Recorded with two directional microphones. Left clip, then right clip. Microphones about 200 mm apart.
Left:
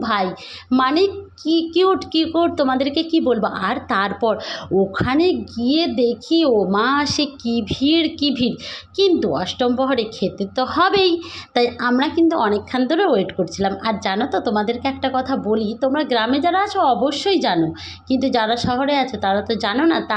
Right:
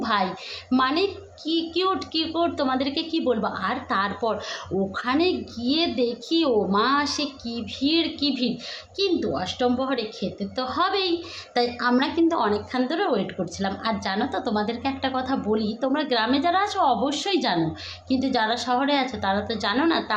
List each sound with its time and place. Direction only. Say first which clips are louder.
0.0 s a woman's voice: left 4 dB; 25° left (ahead or behind)